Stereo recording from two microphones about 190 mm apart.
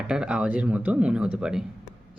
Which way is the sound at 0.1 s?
5° right (ahead or behind).